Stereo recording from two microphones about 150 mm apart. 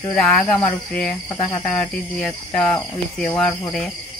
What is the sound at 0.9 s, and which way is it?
Cricket, 5° left (ahead or behind).